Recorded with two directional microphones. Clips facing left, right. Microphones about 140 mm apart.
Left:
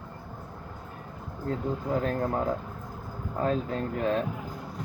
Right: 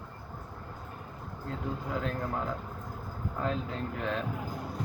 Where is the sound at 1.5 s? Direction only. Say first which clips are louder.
Left 6 dB; 45° left (ahead or behind).